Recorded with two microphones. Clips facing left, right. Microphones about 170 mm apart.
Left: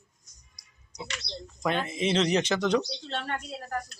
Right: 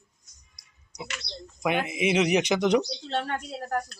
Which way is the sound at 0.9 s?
10° right (ahead or behind).